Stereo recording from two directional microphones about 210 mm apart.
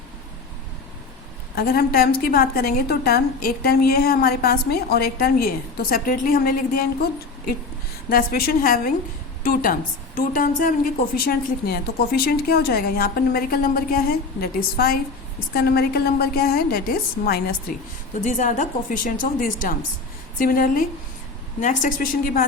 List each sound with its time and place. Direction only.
1.5 s a woman's voice: 45° left (ahead or behind)
18.1 s a woman's voice: 35° left (ahead or behind)